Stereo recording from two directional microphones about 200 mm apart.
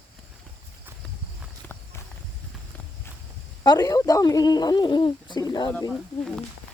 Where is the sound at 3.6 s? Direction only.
20° left (ahead or behind).